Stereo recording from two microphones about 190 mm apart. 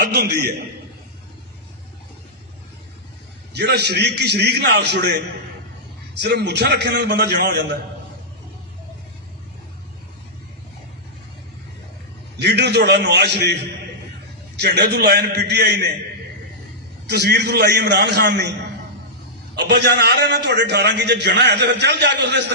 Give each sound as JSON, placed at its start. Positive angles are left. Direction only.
{"t": 0.0, "sound": "a man's voice", "side_deg": -60}
{"t": 3.5, "sound": "a man's voice", "side_deg": -60}
{"t": 12.4, "sound": "a man's voice", "side_deg": -60}
{"t": 17.1, "sound": "a man's voice", "side_deg": -60}
{"t": 19.5, "sound": "a man's voice", "side_deg": -60}